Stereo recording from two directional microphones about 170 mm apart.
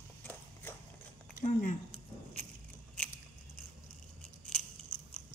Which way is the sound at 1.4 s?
50° left (ahead or behind).